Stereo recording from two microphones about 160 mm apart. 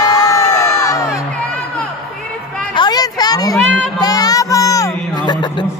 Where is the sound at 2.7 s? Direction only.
25° left (ahead or behind).